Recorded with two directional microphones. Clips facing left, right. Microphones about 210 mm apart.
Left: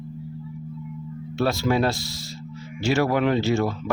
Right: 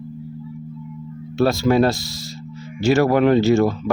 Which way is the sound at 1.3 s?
40° right (ahead or behind).